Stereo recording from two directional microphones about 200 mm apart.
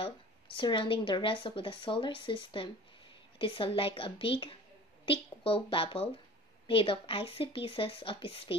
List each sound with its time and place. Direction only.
0.6 s a woman's voice: 25° left (ahead or behind)